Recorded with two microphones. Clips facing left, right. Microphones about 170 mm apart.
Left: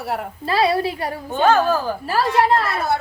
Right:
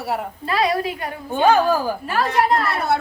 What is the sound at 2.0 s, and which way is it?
Speech, 30° left (ahead or behind).